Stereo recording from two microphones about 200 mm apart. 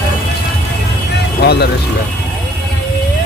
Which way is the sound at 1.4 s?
55° left (ahead or behind).